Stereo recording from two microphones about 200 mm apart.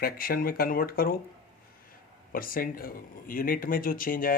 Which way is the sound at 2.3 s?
45° left (ahead or behind).